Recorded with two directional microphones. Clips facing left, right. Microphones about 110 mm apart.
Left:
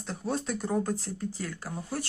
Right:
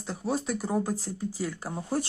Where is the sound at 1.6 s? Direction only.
25° right (ahead or behind).